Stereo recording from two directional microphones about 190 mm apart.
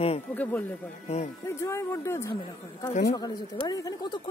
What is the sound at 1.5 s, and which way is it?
Speech, 15° left (ahead or behind).